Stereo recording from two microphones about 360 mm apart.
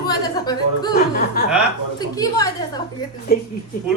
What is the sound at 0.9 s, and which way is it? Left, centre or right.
Speech, left.